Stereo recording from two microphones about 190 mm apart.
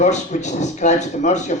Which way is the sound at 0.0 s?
40° left (ahead or behind).